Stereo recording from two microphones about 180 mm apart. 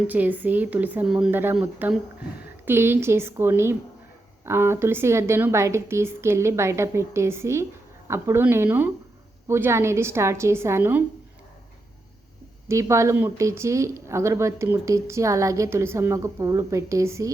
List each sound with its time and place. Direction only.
0.1 s speech: 10° right (ahead or behind)
12.6 s speech: 15° right (ahead or behind)